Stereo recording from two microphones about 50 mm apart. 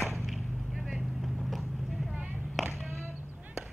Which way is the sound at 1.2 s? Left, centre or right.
Centre.